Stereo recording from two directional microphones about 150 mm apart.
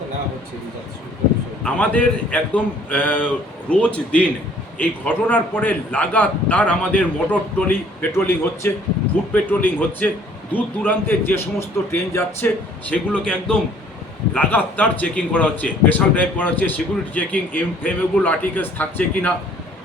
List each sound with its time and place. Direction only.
1.6 s a man's voice: 10° left (ahead or behind)